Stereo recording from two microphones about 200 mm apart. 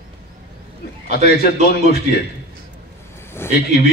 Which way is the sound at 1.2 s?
50° left (ahead or behind).